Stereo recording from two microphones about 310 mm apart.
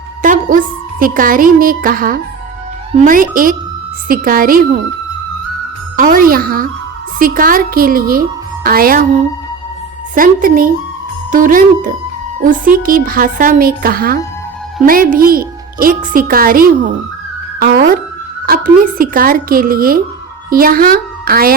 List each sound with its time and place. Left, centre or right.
0.2 s a woman's voice: right
6.0 s speech: right
17.6 s music: right
18.4 s speech: right